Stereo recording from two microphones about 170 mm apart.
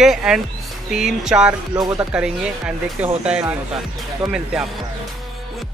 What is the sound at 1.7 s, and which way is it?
Speech, 20° right (ahead or behind).